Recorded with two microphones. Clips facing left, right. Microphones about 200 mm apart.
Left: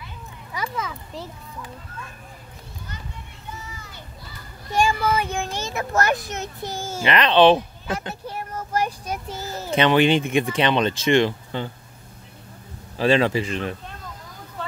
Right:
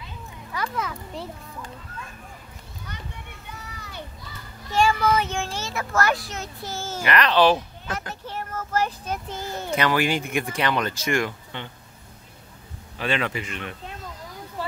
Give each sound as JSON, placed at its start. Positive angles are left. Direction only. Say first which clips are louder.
{"t": 0.7, "sound": "a child's voice", "louder": "even", "side_deg": 0}
{"t": 3.6, "sound": "a sound", "louder": "right 1 dB", "side_deg": -65}
{"t": 4.7, "sound": "a child's voice", "louder": "even", "side_deg": 10}
{"t": 9.7, "sound": "speech", "louder": "left 6 dB", "side_deg": 25}
{"t": 12.9, "sound": "speech", "louder": "left 8 dB", "side_deg": 35}